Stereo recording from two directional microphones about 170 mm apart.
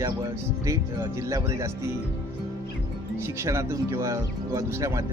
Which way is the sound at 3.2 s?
15° right (ahead or behind).